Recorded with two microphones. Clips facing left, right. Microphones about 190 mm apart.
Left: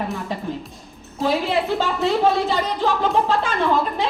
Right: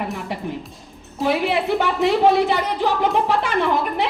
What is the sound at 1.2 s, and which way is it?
A woman's voice, 15° right (ahead or behind).